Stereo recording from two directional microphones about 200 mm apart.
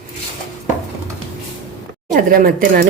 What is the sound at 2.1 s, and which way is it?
Speech, 45° right (ahead or behind).